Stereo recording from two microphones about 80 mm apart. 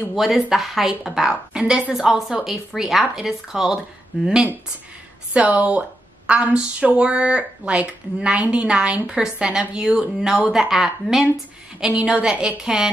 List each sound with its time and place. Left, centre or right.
0.1 s a woman's voice: centre
4.1 s a woman's voice: centre
5.3 s a woman's voice: centre